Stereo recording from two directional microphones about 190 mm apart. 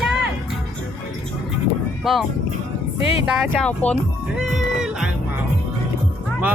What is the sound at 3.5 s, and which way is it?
Speech, 5° left (ahead or behind).